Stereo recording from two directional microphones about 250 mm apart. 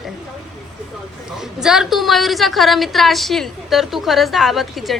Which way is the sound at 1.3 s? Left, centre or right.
Centre.